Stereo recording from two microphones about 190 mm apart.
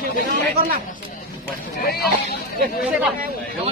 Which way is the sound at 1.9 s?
55° left (ahead or behind).